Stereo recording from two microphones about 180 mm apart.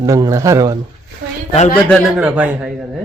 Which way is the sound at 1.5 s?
40° left (ahead or behind).